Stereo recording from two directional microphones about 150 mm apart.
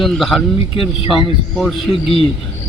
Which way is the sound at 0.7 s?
35° left (ahead or behind).